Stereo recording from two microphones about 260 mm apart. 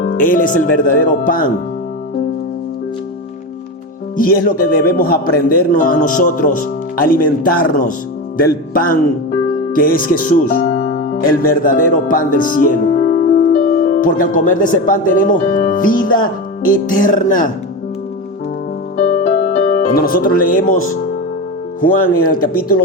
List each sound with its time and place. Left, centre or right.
0.0 s a man's voice: left
4.2 s a man's voice: left
18.9 s music: left
21.8 s a man's voice: left